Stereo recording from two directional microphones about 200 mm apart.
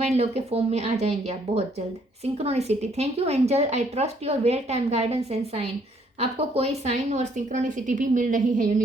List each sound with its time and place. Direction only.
0.0 s a woman's voice: 30° right (ahead or behind)